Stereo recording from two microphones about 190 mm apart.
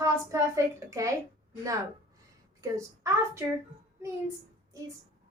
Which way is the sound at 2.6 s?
15° right (ahead or behind).